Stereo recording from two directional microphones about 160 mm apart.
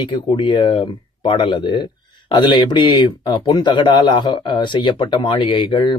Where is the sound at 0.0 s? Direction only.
30° left (ahead or behind).